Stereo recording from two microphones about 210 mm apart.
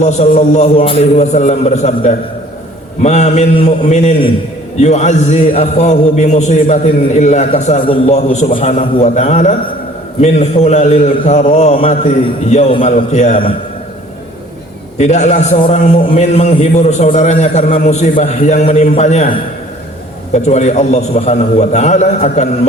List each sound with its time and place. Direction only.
0.0 s a man's voice: 35° left (ahead or behind)
14.9 s a man's voice: 35° left (ahead or behind)